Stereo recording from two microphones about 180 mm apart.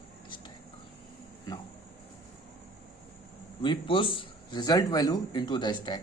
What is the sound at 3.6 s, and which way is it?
A man's voice, 30° left (ahead or behind).